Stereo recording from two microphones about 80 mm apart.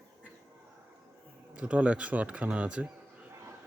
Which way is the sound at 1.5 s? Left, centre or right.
Centre.